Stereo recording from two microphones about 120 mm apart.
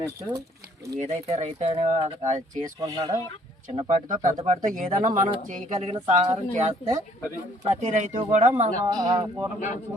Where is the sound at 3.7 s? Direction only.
55° right (ahead or behind).